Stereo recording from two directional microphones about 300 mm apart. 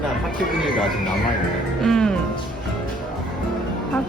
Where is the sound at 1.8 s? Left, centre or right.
Centre.